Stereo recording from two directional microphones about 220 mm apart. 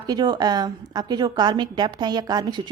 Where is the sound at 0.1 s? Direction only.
20° right (ahead or behind).